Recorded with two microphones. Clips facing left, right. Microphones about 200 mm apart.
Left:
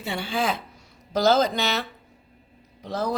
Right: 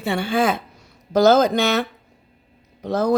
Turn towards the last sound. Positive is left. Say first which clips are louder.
# right 8 dB
turn(degrees=-50)  # may be behind; listen again after turning